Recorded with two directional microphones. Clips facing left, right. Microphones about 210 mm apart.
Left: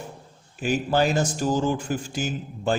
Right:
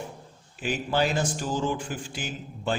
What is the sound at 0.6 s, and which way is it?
A man's voice, 45° left (ahead or behind).